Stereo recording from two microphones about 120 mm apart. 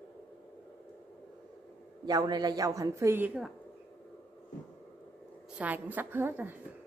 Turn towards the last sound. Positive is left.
turn(degrees=-15)  # may be behind; listen again after turning